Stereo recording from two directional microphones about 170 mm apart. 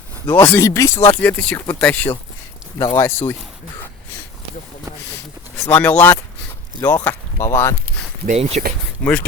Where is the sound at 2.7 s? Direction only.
20° left (ahead or behind).